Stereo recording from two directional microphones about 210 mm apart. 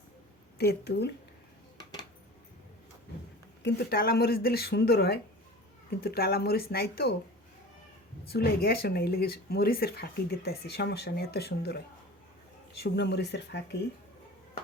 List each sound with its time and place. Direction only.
0.6 s speech: 50° left (ahead or behind)
3.6 s speech: 50° left (ahead or behind)
8.3 s speech: 45° left (ahead or behind)